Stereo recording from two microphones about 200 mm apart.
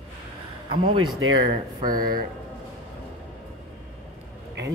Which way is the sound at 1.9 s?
45° right (ahead or behind).